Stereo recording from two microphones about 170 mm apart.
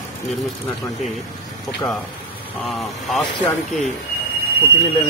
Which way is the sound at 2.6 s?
Centre (ahead or behind).